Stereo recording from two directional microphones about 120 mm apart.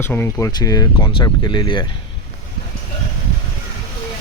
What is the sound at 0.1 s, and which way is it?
Speech, 20° left (ahead or behind).